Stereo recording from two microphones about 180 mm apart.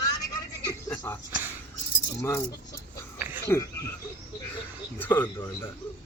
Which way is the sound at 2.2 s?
15° left (ahead or behind).